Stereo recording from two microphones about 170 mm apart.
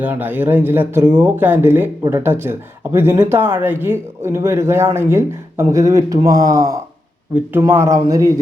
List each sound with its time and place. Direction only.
0.0 s speech: 10° right (ahead or behind)